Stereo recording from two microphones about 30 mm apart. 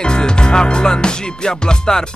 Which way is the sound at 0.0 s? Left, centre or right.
Left.